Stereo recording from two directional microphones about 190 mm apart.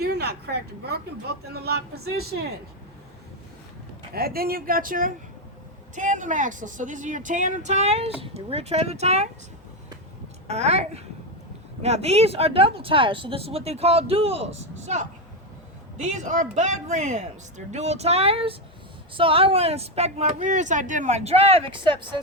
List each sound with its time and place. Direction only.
0.0 s speech: 55° right (ahead or behind)
4.1 s speech: 50° right (ahead or behind); by 9.3 s 35° right (ahead or behind)
10.5 s speech: 35° right (ahead or behind)